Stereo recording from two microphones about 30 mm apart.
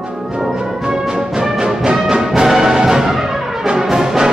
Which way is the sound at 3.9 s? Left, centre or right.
Centre.